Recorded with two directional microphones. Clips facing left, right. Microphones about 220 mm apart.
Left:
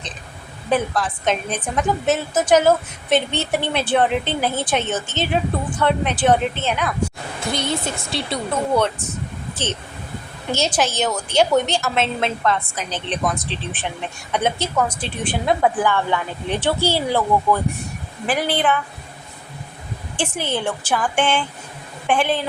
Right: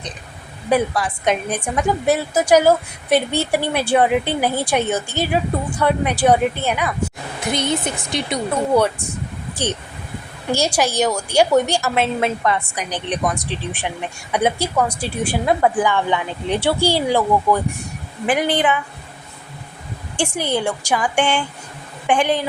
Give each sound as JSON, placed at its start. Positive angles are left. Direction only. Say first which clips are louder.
{"t": 0.7, "sound": "a woman's voice", "louder": "right 2 dB", "side_deg": -10}
{"t": 10.5, "sound": "a woman's voice", "louder": "right 2 dB", "side_deg": -10}
{"t": 15.8, "sound": "a woman's voice", "louder": "right 1 dB", "side_deg": -15}
{"t": 20.1, "sound": "a woman's voice", "louder": "right 3 dB", "side_deg": -15}